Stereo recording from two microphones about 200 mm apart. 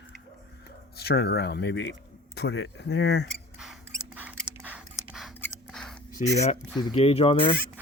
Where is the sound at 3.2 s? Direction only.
Centre (ahead or behind).